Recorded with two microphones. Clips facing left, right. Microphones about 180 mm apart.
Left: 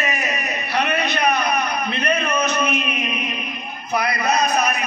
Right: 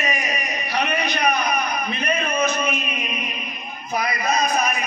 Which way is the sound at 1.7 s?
65° left (ahead or behind).